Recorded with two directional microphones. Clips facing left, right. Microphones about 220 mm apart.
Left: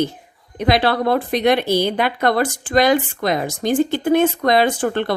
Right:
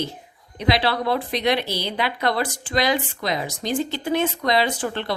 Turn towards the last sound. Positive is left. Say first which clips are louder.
# left 6 dB
turn(degrees=50)  # may be behind; listen again after turning